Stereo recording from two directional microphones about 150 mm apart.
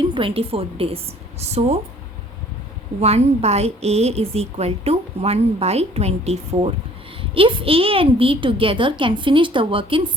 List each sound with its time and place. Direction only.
0.1 s a woman's voice: 35° right (ahead or behind)
3.0 s a woman's voice: 45° right (ahead or behind)